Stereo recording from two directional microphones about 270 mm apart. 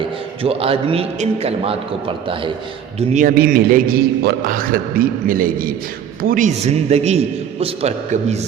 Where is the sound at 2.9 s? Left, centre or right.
Right.